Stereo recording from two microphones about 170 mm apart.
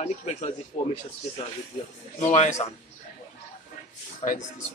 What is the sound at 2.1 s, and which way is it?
Speech, 45° left (ahead or behind).